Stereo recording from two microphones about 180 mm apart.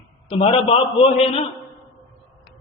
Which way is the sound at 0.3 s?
35° left (ahead or behind).